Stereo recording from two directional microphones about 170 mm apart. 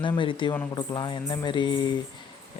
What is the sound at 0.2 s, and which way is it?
Speech, 30° left (ahead or behind).